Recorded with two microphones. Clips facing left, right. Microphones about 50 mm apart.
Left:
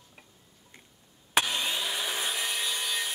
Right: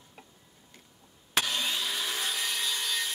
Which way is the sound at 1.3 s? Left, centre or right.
Centre.